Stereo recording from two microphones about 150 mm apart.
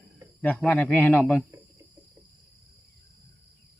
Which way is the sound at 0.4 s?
10° left (ahead or behind).